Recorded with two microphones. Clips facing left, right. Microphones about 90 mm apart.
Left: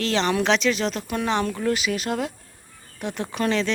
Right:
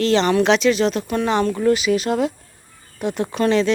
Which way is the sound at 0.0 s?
Centre (ahead or behind).